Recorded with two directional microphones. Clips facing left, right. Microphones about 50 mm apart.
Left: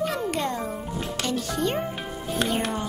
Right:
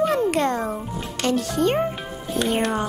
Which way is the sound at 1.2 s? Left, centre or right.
Right.